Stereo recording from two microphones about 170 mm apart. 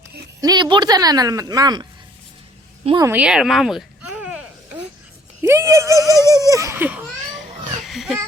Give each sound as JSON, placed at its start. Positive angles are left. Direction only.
{"t": 0.4, "sound": "a woman's voice", "side_deg": -25}
{"t": 3.0, "sound": "a sound", "side_deg": -10}
{"t": 5.4, "sound": "speech", "side_deg": -15}
{"t": 6.1, "sound": "speech", "side_deg": 15}
{"t": 6.5, "sound": "speech", "side_deg": -20}
{"t": 7.9, "sound": "children playing", "side_deg": 0}